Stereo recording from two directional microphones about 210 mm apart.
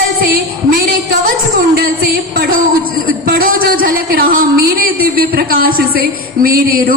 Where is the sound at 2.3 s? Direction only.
45° right (ahead or behind).